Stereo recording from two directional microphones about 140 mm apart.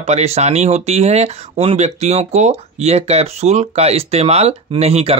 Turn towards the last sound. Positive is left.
turn(degrees=-45)  # may be behind; listen again after turning